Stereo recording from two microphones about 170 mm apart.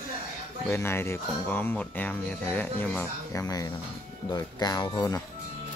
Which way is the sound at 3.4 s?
20° left (ahead or behind).